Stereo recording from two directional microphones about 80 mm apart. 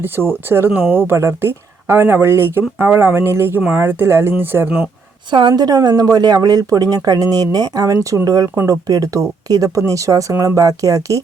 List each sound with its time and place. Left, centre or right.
0.0 s speech: right
5.3 s a woman's voice: right